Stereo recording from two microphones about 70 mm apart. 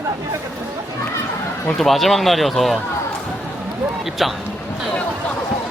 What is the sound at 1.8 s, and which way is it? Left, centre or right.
Speech, centre.